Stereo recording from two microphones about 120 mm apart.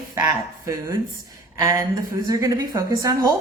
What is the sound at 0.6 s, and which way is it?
A woman's voice, 25° right (ahead or behind).